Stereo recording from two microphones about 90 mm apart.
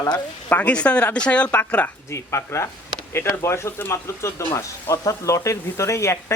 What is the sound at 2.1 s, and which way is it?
Speech, 30° left (ahead or behind).